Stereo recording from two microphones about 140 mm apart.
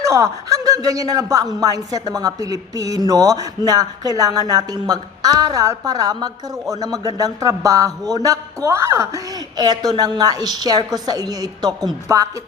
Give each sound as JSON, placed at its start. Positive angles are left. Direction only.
{"t": 0.0, "sound": "a man's voice", "side_deg": -20}